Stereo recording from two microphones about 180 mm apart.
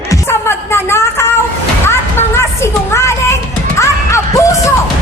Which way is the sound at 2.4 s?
15° left (ahead or behind).